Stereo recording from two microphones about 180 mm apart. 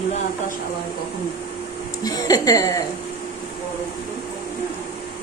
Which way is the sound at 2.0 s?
20° left (ahead or behind).